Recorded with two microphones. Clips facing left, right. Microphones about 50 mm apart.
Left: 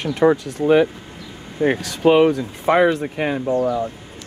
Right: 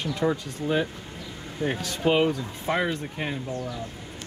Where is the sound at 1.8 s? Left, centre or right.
Left.